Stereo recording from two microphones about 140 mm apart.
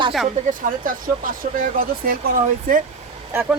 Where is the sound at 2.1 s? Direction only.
90° right.